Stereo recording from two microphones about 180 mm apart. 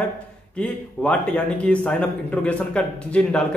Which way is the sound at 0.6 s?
5° left (ahead or behind).